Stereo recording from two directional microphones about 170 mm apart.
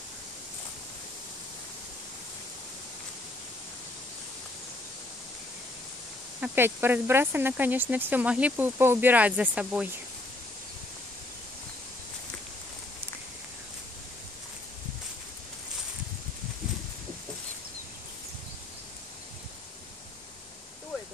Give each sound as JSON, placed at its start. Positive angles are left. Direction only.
{"t": 6.4, "sound": "speech", "side_deg": -10}